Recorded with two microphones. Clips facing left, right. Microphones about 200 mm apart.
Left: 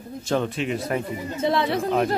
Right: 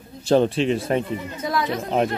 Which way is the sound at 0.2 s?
30° right (ahead or behind).